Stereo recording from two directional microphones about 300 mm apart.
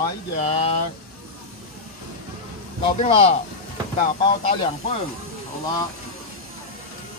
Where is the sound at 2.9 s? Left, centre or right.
Centre.